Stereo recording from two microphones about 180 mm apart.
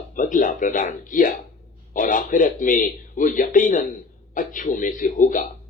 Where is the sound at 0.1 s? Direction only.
45° left (ahead or behind).